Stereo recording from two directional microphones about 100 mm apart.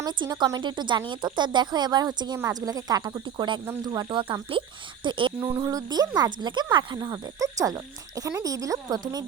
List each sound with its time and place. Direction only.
0.2 s a woman's voice: 45° right (ahead or behind)
3.8 s speech: 40° right (ahead or behind)
4.2 s speech: 60° right (ahead or behind)
5.6 s speech: 40° right (ahead or behind)